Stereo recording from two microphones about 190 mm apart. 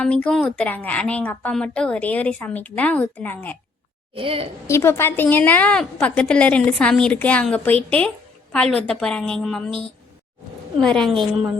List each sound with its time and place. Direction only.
0.0 s a woman's voice: 5° left (ahead or behind)
4.1 s a woman's voice: 30° right (ahead or behind)
4.6 s a woman's voice: 15° left (ahead or behind)
10.8 s a woman's voice: 5° left (ahead or behind)